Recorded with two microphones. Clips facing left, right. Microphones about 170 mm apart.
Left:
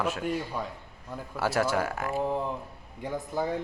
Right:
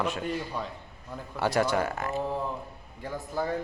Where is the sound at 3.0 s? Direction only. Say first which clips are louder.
Left 1 dB; 20° left (ahead or behind).